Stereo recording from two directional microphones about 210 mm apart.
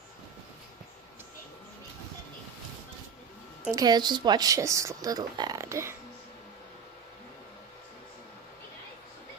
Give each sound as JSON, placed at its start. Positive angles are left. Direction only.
{"t": 3.7, "sound": "speech", "side_deg": -20}